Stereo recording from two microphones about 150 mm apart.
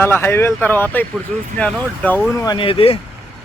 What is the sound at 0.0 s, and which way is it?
Speech, 15° left (ahead or behind).